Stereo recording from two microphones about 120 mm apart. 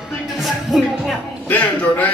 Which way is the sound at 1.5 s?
15° left (ahead or behind).